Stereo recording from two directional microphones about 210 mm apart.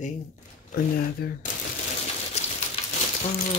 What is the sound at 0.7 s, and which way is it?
Speech, 45° left (ahead or behind).